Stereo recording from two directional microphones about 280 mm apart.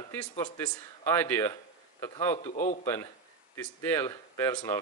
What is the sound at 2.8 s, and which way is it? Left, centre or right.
Speech, centre.